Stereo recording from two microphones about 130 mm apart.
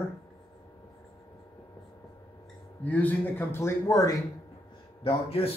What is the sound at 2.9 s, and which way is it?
Speech, 10° left (ahead or behind).